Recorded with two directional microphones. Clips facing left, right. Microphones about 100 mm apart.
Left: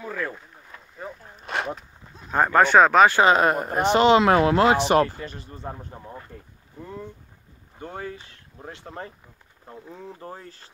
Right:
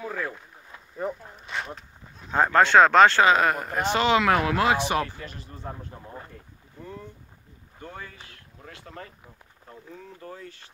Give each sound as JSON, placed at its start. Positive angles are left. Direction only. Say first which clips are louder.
{"t": 0.0, "sound": "speech", "louder": "left 1 dB", "side_deg": -10}
{"t": 1.4, "sound": "speech", "louder": "left 7 dB", "side_deg": 70}
{"t": 2.3, "sound": "speech", "louder": "left 1 dB", "side_deg": 10}
{"t": 3.2, "sound": "speech", "louder": "left 2 dB", "side_deg": 25}
{"t": 7.8, "sound": "speech", "louder": "left 6 dB", "side_deg": 35}